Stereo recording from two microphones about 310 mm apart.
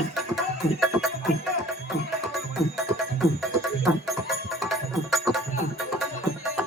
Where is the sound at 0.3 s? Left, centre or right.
Centre.